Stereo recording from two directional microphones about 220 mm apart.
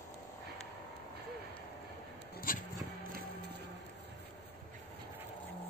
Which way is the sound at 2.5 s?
40° left (ahead or behind).